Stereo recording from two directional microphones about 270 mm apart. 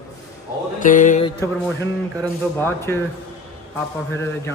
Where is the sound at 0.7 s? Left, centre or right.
Left.